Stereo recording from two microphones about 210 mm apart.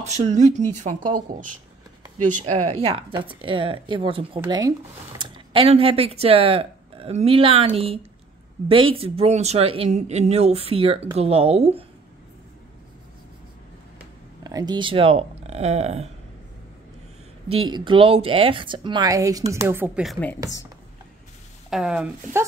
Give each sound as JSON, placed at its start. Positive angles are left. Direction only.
{"t": 0.0, "sound": "speech", "side_deg": -30}
{"t": 2.7, "sound": "speech", "side_deg": -25}
{"t": 14.4, "sound": "speech", "side_deg": -20}
{"t": 17.6, "sound": "speech", "side_deg": -20}
{"t": 21.6, "sound": "speech", "side_deg": -5}